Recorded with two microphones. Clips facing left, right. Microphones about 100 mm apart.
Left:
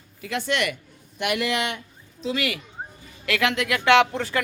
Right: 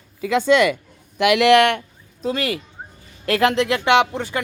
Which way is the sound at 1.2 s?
85° right.